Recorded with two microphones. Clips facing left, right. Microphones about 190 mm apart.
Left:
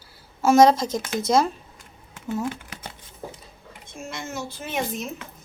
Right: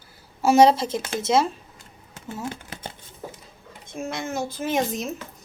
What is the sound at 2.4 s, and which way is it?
Shuffling cards, 30° right (ahead or behind).